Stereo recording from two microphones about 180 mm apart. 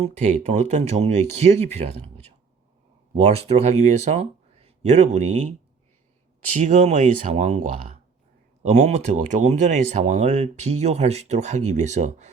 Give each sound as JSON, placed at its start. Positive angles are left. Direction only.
{"t": 0.0, "sound": "speech", "side_deg": -35}
{"t": 6.6, "sound": "speech", "side_deg": -40}